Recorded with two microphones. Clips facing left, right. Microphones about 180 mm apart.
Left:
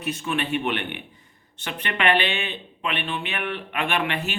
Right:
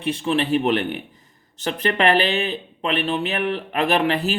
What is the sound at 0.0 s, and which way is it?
Speech, 30° right (ahead or behind).